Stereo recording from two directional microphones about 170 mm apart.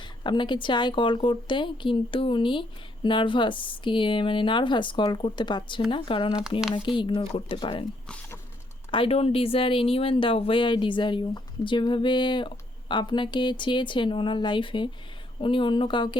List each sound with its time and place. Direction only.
0.2 s speech: 30° left (ahead or behind)
8.0 s a sound: 5° left (ahead or behind)
8.9 s speech: 35° left (ahead or behind)